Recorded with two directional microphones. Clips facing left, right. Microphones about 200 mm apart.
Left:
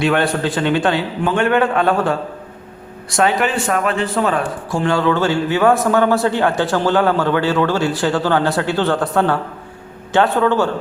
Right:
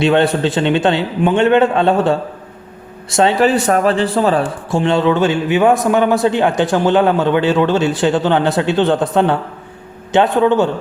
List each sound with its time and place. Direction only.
0.0 s a man's voice: 25° right (ahead or behind)
4.8 s a man's voice: 20° right (ahead or behind)